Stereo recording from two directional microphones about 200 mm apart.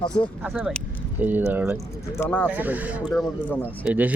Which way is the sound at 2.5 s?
10° right (ahead or behind).